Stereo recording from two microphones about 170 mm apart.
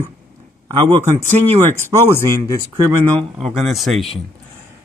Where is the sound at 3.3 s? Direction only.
Centre (ahead or behind).